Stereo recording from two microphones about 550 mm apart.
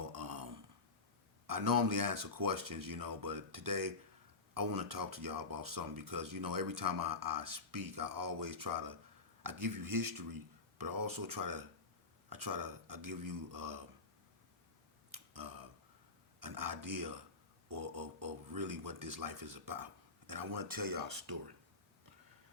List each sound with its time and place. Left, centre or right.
0.1 s a sound: right
1.5 s speech: right
15.1 s tick: right
16.4 s speech: right